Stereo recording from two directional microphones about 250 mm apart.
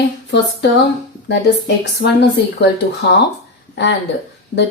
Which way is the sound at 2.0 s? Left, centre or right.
Left.